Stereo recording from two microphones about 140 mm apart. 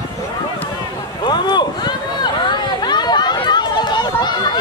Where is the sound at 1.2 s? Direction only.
30° left (ahead or behind).